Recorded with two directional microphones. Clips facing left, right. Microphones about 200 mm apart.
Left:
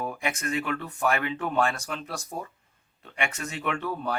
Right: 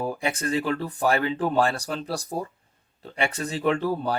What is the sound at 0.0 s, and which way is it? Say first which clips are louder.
Speech: right 4 dB; 30° right (ahead or behind).